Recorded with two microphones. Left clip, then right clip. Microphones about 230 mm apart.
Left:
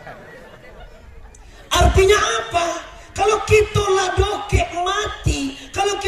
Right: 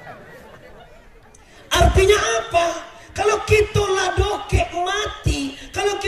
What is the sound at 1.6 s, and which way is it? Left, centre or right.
Speech, centre.